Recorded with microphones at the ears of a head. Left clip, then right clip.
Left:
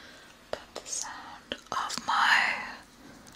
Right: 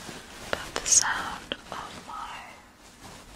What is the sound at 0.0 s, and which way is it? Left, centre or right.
Whispering, right.